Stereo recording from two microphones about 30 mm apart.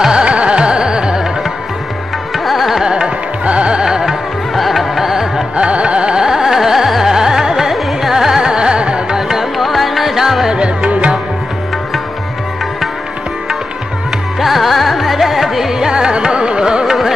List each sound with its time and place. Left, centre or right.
0.1 s music: right
2.3 s music: centre
2.8 s music: right
3.4 s music: right
4.6 s music: centre
5.6 s carnatic music: right
6.2 s carnatic music: centre
8.4 s carnatic music: right
9.1 s music: centre
9.6 s music: centre
10.5 s music: right
14.4 s carnatic music: centre
15.9 s carnatic music: right
16.8 s carnatic music: centre